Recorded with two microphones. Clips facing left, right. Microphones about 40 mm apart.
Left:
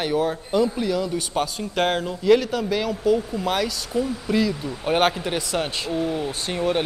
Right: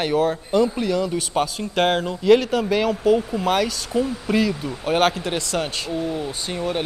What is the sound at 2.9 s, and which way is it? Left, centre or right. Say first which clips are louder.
Speech: right 2 dB; right.